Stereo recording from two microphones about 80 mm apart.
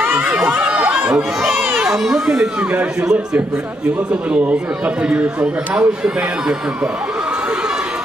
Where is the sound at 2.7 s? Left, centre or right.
Right.